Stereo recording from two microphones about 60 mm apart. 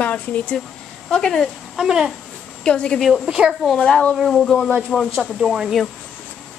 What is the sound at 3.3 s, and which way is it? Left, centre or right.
Speech, centre.